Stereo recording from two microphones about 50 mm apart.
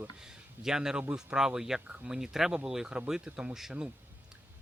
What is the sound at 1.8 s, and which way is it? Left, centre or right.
Speech, right.